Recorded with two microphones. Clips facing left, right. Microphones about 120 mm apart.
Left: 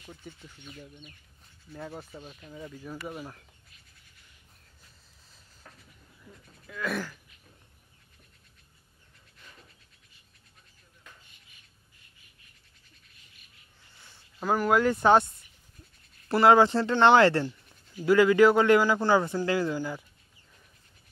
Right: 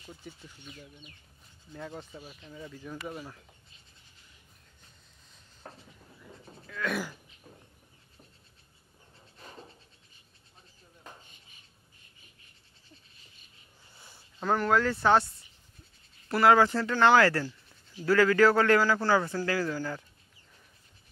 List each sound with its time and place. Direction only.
0.1 s speech: 10° right (ahead or behind)
1.7 s speech: 10° left (ahead or behind)
5.6 s train: 30° right (ahead or behind)
6.7 s speech: 5° left (ahead or behind)
9.4 s a sound: 35° right (ahead or behind)
13.9 s a sound: 10° right (ahead or behind)
14.4 s speech: 10° left (ahead or behind)
16.3 s speech: 25° left (ahead or behind)